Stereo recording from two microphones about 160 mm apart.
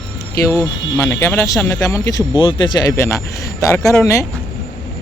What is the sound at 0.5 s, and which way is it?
Speech, 15° left (ahead or behind).